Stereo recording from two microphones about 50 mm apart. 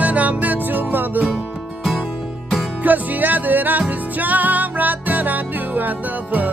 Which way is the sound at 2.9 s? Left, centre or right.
Right.